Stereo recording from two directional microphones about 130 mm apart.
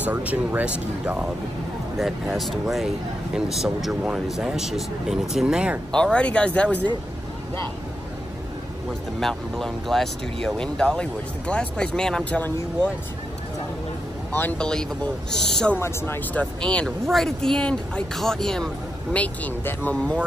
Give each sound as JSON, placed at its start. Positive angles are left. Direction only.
{"t": 0.0, "sound": "speech", "side_deg": -10}
{"t": 5.9, "sound": "speech", "side_deg": 5}
{"t": 9.2, "sound": "speech", "side_deg": 0}
{"t": 14.3, "sound": "speech", "side_deg": 10}
{"t": 15.8, "sound": "speech", "side_deg": 20}
{"t": 16.6, "sound": "speech", "side_deg": 5}